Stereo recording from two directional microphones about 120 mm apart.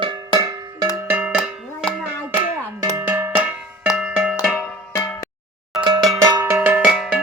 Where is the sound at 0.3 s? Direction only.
30° right (ahead or behind).